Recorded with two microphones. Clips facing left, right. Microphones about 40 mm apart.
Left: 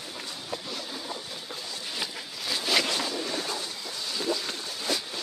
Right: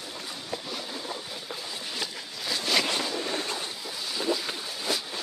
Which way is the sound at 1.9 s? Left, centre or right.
Centre.